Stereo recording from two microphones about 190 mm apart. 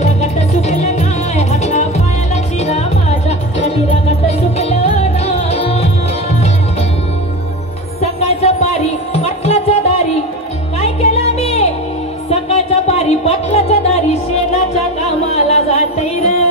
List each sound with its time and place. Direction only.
0.0 s music: 35° left (ahead or behind)
8.0 s music: 35° left (ahead or behind)
10.8 s a sound: 35° left (ahead or behind)
12.3 s music: 35° left (ahead or behind)